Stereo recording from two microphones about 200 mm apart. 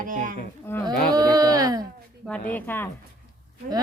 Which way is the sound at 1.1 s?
20° right (ahead or behind).